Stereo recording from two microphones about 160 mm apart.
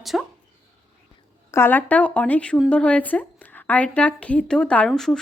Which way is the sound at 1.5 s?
15° left (ahead or behind).